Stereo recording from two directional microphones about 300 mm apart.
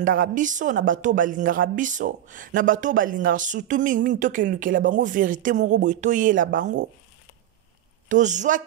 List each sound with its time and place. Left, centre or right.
0.0 s speech: right
8.1 s speech: right